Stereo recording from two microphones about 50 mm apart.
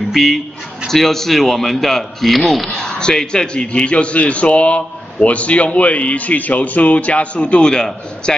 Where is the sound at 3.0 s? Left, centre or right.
Centre.